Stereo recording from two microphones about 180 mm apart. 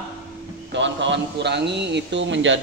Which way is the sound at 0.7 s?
90° right.